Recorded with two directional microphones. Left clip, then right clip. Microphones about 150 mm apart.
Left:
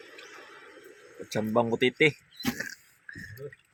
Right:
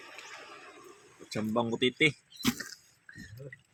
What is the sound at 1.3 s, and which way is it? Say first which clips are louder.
Speech: left 5 dB; 30° left (ahead or behind).